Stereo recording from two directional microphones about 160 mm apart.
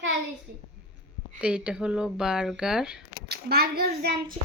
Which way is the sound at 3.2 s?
85° right.